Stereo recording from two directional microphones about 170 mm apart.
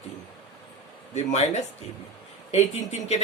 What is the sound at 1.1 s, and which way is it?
Speech, 40° left (ahead or behind).